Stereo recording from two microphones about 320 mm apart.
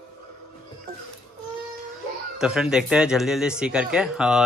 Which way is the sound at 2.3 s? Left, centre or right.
Centre.